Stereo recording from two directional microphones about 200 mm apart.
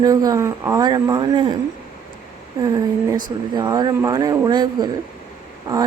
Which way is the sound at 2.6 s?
20° right (ahead or behind).